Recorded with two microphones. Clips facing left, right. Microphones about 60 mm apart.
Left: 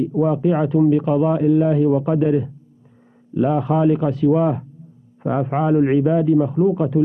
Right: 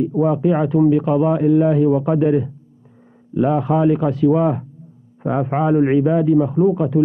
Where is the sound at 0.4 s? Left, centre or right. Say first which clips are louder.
Right 1 dB; centre.